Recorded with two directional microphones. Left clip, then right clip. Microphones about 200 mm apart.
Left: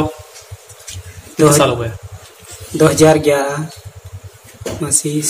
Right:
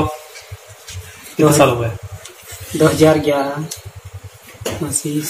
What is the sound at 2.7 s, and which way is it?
Speech, 15° left (ahead or behind).